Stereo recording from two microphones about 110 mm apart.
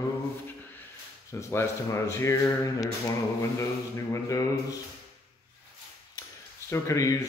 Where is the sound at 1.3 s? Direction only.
25° left (ahead or behind).